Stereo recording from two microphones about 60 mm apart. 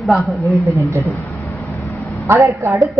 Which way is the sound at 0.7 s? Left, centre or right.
Right.